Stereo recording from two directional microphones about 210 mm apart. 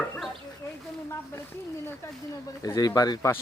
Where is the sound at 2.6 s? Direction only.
15° left (ahead or behind).